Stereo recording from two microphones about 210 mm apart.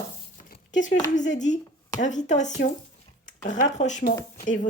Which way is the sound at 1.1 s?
35° left (ahead or behind).